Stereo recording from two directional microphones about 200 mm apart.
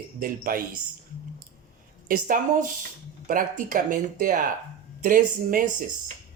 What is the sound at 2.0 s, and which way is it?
Speech, 45° right (ahead or behind).